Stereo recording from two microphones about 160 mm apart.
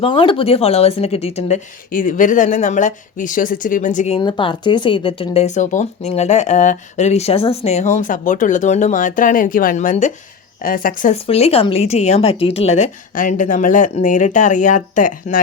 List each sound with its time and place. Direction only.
0.0 s speech: 30° left (ahead or behind); by 4.2 s 45° left (ahead or behind)
4.2 s speech: 30° left (ahead or behind); by 10.1 s 50° left (ahead or behind)
10.6 s a woman's voice: 60° left (ahead or behind)
11.1 s speech: 40° left (ahead or behind); by 15.4 s 55° left (ahead or behind)